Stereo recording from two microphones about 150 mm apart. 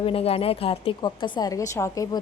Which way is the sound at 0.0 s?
40° left (ahead or behind).